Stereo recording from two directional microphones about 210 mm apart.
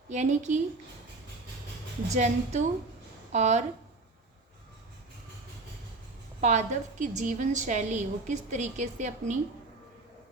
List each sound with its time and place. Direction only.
0.1 s a woman's voice: 35° right (ahead or behind)
2.1 s a woman's voice: 35° right (ahead or behind)
6.4 s a woman's voice: 35° right (ahead or behind)